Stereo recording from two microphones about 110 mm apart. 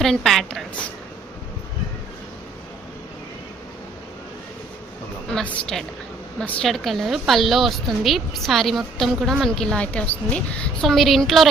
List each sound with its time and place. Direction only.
0.0 s a woman's voice: centre (ahead or behind)
5.3 s a woman's voice: 5° left (ahead or behind)
6.7 s a woman's voice: centre (ahead or behind)
10.8 s a woman's voice: centre (ahead or behind)